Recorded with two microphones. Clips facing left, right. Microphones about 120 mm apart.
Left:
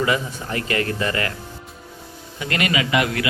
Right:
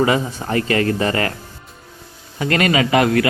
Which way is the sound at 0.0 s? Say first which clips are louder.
Right 5 dB; 30° right (ahead or behind).